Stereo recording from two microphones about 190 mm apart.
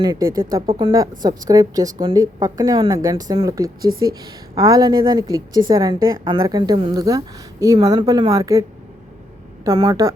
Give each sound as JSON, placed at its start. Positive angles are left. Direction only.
{"t": 0.0, "sound": "a woman's voice", "side_deg": -20}
{"t": 9.6, "sound": "a woman's voice", "side_deg": -20}